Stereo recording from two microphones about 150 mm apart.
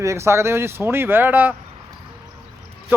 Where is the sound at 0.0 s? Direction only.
20° right (ahead or behind).